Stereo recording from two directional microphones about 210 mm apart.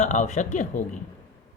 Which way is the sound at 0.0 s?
35° left (ahead or behind).